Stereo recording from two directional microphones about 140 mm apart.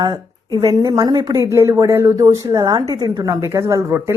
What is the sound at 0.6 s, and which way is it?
A woman's voice, 25° right (ahead or behind).